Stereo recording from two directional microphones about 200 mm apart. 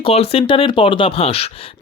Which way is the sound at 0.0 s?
30° left (ahead or behind).